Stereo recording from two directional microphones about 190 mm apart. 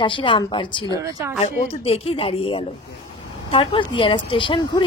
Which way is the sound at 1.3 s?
35° left (ahead or behind).